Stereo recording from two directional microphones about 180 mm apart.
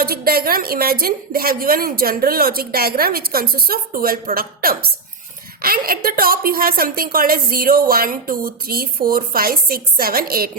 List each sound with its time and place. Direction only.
0.0 s a woman's voice: 55° right (ahead or behind)